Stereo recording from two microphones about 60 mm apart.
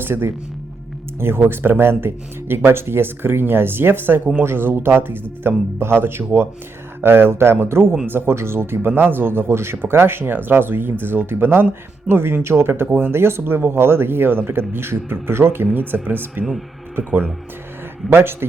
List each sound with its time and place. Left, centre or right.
0.0 s speech: right
16.4 s speech: centre
16.9 s speech: right